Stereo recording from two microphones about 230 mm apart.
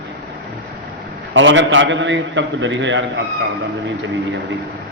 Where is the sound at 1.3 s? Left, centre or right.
Right.